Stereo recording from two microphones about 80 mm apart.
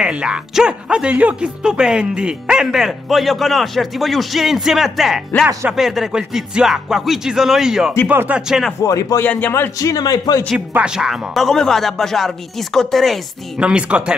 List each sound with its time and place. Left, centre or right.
0.0 s speech: centre
5.7 s music: centre
8.1 s speech: right
8.4 s music: centre
8.8 s a man's voice: left
9.2 s speech: left
9.8 s a man's voice: left
10.7 s speech: centre
13.6 s music: centre